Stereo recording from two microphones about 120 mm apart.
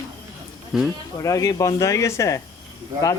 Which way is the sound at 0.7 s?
Centre (ahead or behind).